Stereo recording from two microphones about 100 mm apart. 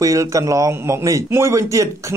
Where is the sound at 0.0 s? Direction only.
35° right (ahead or behind).